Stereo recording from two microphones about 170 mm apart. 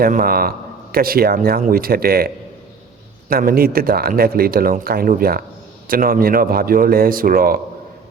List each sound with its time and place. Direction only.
0.0 s speech: 60° right (ahead or behind)